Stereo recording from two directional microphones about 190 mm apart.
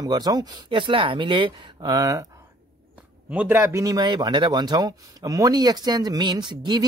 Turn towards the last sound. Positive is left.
turn(degrees=-25)  # may be behind; listen again after turning